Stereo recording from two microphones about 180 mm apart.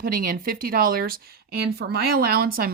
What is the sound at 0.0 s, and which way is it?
Speech, 55° right (ahead or behind).